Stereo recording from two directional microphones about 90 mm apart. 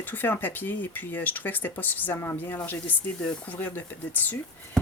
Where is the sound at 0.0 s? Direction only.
20° left (ahead or behind).